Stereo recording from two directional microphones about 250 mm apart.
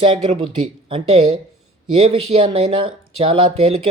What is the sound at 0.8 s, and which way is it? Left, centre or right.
Speech, right.